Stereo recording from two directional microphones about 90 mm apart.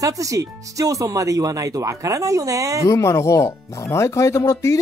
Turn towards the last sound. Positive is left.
turn(degrees=35)  # may be behind; listen again after turning